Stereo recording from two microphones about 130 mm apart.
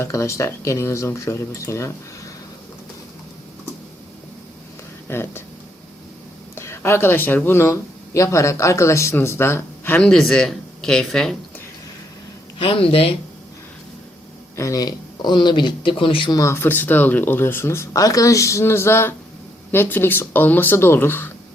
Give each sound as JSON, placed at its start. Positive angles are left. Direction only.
{"t": 0.0, "sound": "speech", "side_deg": 20}
{"t": 5.0, "sound": "speech", "side_deg": 20}
{"t": 6.6, "sound": "speech", "side_deg": 20}
{"t": 10.1, "sound": "speech", "side_deg": 5}
{"t": 12.5, "sound": "speech", "side_deg": 45}
{"t": 14.5, "sound": "speech", "side_deg": 25}
{"t": 16.4, "sound": "speech", "side_deg": 20}